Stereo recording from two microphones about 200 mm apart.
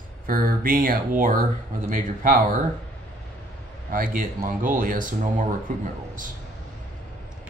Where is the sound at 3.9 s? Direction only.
45° right (ahead or behind).